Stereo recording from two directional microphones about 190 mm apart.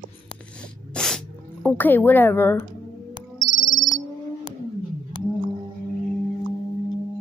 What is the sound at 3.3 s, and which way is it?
Music, 45° right (ahead or behind).